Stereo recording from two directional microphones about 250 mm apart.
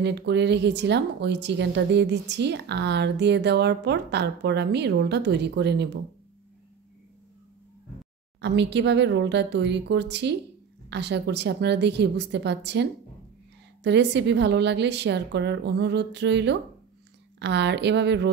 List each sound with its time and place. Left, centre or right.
0.0 s speech: right
8.4 s speech: right
13.8 s speech: right